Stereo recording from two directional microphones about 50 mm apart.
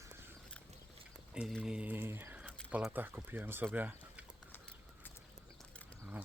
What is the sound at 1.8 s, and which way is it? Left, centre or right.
Speech, right.